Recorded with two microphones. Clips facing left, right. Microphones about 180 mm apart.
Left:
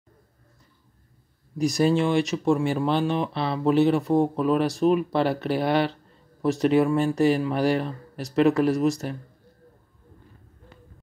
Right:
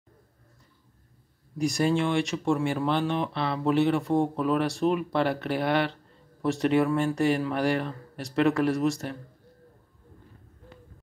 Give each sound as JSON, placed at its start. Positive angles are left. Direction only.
{"t": 1.6, "sound": "speech", "side_deg": 20}